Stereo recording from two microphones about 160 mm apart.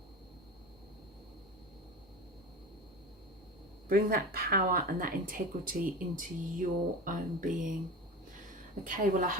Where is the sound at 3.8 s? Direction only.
65° right (ahead or behind).